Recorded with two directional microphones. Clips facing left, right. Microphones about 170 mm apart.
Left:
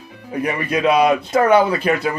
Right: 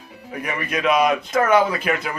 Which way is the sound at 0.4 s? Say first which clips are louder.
Left 4 dB; 30° left (ahead or behind).